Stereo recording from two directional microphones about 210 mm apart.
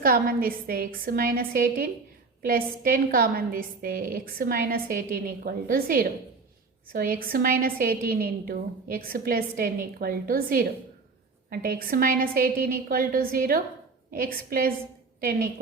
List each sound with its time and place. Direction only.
0.0 s a woman's voice: 45° right (ahead or behind)